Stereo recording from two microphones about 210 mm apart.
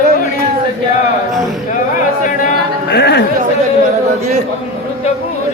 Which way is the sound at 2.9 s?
50° left (ahead or behind).